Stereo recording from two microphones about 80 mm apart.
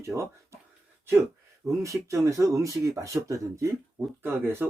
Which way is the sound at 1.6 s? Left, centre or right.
Right.